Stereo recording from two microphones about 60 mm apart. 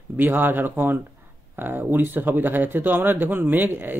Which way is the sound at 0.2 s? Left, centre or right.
Right.